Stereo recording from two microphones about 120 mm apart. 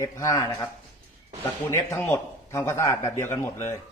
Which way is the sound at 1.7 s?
20° left (ahead or behind).